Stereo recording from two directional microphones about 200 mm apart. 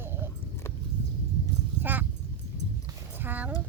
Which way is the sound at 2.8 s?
10° right (ahead or behind).